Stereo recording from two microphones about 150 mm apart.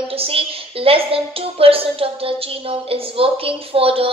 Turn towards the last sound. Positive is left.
turn(degrees=-40)  # may be behind; listen again after turning